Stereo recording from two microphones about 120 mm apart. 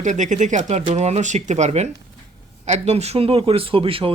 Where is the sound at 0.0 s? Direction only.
90° right.